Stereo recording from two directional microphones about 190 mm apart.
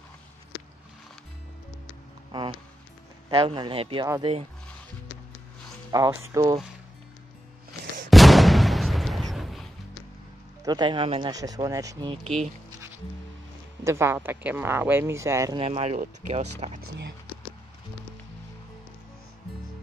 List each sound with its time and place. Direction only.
3.3 s speech: 25° right (ahead or behind)
5.9 s speech: 15° right (ahead or behind)
8.1 s artillery fire: centre (ahead or behind)
10.6 s speech: 20° right (ahead or behind)
13.8 s speech: 15° right (ahead or behind)
15.6 s speech: 30° right (ahead or behind)